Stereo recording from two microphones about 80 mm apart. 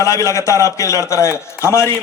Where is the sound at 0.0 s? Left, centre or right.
Left.